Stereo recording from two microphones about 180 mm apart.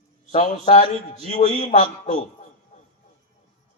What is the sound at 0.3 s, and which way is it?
A man's voice, 40° left (ahead or behind).